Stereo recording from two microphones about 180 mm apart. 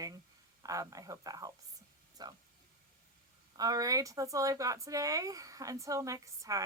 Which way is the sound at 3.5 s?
20° right (ahead or behind).